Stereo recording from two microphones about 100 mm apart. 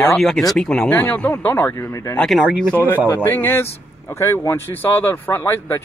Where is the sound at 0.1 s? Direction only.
Centre (ahead or behind); by 2.1 s 25° left (ahead or behind).